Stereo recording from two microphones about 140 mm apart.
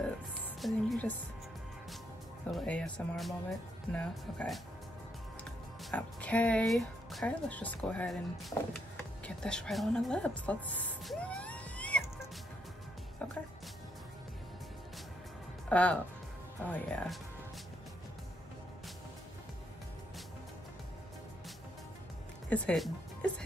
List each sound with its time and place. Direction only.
0.6 s speech: centre (ahead or behind)
2.5 s speech: 5° left (ahead or behind)
11.1 s music: 5° left (ahead or behind)
15.7 s speech: 10° left (ahead or behind)
22.5 s speech: 10° left (ahead or behind)